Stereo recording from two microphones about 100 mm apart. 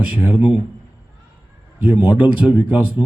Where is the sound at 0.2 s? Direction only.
15° right (ahead or behind).